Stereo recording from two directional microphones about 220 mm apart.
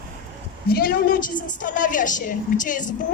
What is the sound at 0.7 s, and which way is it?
A woman's voice, 40° left (ahead or behind).